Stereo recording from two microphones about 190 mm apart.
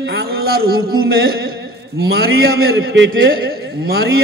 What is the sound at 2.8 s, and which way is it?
Speech, 85° right.